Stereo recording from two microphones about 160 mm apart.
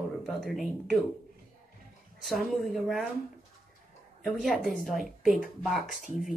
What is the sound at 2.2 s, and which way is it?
Speech, centre (ahead or behind).